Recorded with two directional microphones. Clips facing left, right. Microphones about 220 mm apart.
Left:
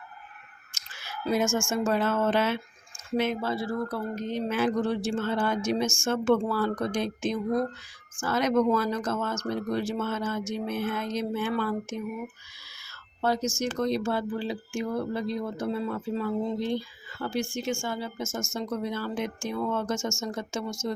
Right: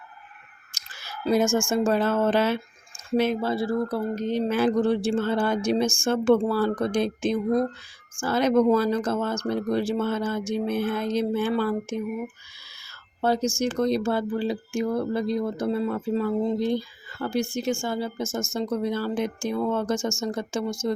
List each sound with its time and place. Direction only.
0.7 s speech: 35° right (ahead or behind)
13.2 s speech: 30° right (ahead or behind)